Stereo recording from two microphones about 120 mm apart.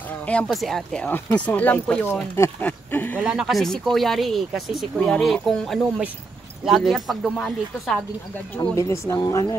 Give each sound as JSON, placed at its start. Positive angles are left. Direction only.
{"t": 0.3, "sound": "speech", "side_deg": 5}
{"t": 3.3, "sound": "speech", "side_deg": -5}
{"t": 8.7, "sound": "speech", "side_deg": 25}